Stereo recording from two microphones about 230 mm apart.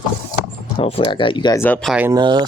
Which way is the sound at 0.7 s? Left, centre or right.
Left.